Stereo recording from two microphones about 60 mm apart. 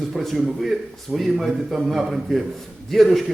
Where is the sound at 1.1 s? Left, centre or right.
Centre.